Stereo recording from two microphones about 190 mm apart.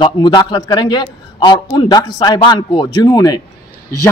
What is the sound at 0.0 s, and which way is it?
A man's voice, 25° left (ahead or behind).